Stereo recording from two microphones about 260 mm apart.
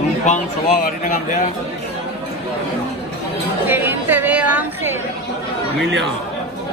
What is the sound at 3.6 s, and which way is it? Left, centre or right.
Chatter, centre.